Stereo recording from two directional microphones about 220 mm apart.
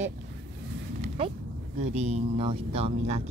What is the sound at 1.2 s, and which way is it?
Speech, 25° right (ahead or behind).